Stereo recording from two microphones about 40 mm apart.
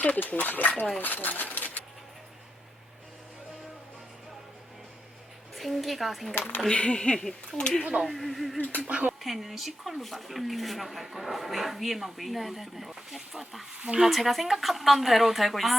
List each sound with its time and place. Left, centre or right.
0.3 s speech: left
5.5 s speech: centre
6.3 s speech: left
6.7 s speech: left; by 8.5 s centre
8.8 s speech: right
9.2 s speech: centre
13.7 s speech: right
14.0 s speech: centre